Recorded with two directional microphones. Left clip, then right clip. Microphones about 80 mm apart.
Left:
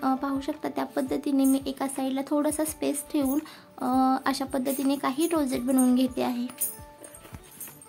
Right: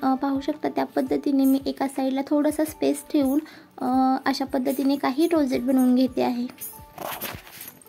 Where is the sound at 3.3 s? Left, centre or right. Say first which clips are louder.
Right 4 dB; right.